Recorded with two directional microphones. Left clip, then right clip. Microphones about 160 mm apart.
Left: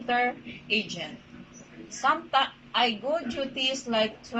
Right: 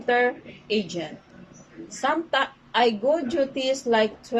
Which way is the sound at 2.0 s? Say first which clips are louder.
Right 1 dB; 50° right (ahead or behind).